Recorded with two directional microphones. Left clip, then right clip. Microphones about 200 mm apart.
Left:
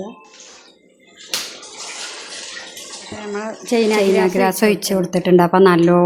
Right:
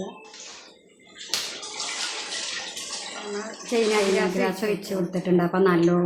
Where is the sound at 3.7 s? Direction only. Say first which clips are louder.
Left 6 dB; 50° left (ahead or behind).